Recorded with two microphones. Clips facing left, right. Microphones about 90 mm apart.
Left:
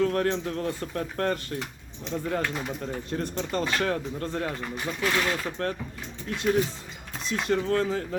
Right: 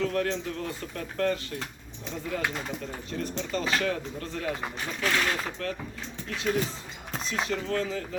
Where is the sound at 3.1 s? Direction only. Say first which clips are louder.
Left 1 dB; 45° left (ahead or behind).